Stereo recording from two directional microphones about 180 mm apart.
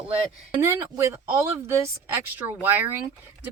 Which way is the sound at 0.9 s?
15° right (ahead or behind).